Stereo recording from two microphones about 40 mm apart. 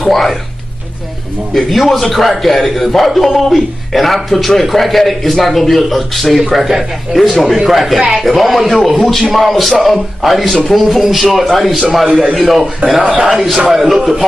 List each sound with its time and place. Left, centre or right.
0.1 s a man's voice: centre
1.5 s a man's voice: centre
13.0 s a man's voice: right
13.4 s a man's voice: centre
13.7 s speech: centre